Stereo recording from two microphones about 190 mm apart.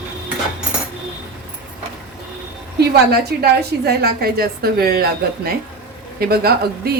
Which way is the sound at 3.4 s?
55° right (ahead or behind).